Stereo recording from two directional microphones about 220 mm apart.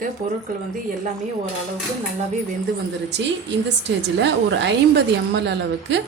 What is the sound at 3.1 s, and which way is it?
A woman's voice, 55° right (ahead or behind).